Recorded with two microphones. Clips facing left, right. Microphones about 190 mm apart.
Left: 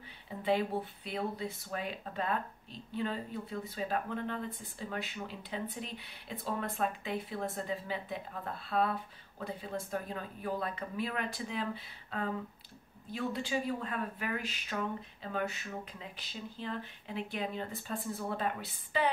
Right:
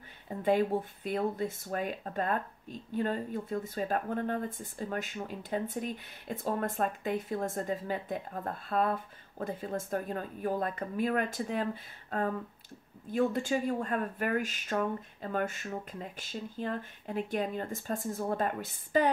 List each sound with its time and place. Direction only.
0.4 s speech: 45° right (ahead or behind)